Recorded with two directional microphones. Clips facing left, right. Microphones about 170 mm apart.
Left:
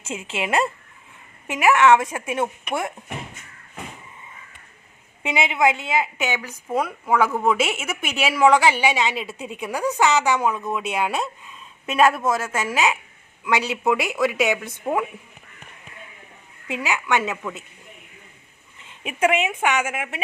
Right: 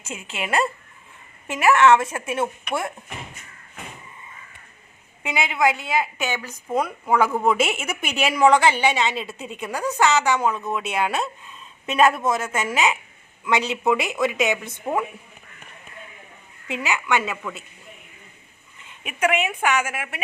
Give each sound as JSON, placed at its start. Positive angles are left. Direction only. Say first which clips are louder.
{"t": 0.0, "sound": "a woman's voice", "louder": "left 3 dB", "side_deg": 25}
{"t": 5.2, "sound": "a woman's voice", "louder": "left 1 dB", "side_deg": 25}
{"t": 16.6, "sound": "a woman's voice", "louder": "even", "side_deg": 15}
{"t": 19.0, "sound": "speech", "louder": "left 2 dB", "side_deg": 25}